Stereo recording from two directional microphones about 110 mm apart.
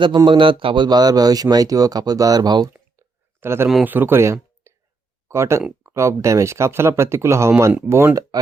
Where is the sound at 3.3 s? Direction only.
20° right (ahead or behind).